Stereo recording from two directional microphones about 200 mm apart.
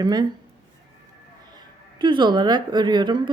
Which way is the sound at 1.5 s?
25° right (ahead or behind).